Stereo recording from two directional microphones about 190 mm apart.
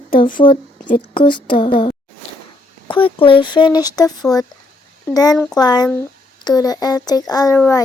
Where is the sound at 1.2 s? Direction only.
25° left (ahead or behind).